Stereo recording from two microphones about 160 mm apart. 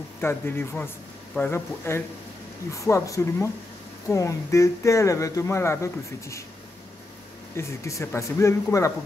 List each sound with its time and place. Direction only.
0.2 s a man's voice: 15° left (ahead or behind)
7.5 s a man's voice: 20° left (ahead or behind)